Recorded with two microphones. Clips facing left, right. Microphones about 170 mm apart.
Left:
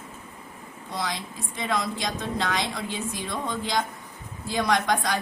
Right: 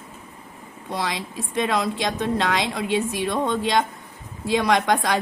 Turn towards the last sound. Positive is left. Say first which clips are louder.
# right 4 dB
turn(degrees=-65)  # may be behind; listen again after turning